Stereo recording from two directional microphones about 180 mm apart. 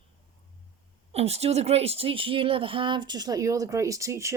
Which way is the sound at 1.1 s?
35° right (ahead or behind).